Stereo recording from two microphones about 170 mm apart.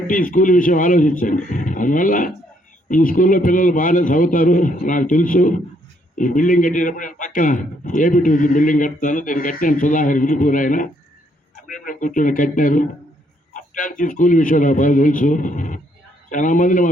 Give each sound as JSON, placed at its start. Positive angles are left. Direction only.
{"t": 0.1, "sound": "speech", "side_deg": 50}
{"t": 11.9, "sound": "speech", "side_deg": 50}